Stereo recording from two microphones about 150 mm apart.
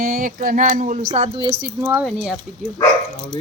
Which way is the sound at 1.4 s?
35° right (ahead or behind).